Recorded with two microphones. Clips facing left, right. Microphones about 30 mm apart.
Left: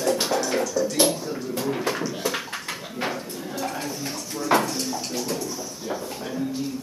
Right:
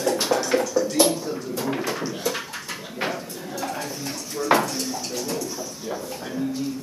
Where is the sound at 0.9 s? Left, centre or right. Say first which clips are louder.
Right 2 dB; centre.